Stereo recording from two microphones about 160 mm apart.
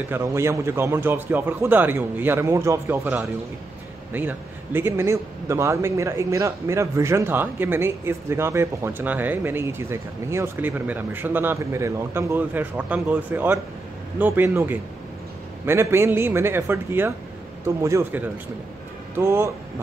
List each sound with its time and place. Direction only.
0.1 s a man's voice: 15° right (ahead or behind)